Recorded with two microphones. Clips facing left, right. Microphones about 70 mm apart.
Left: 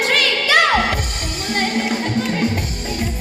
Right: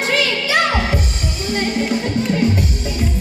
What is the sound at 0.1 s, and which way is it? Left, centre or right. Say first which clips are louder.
Music: even; left.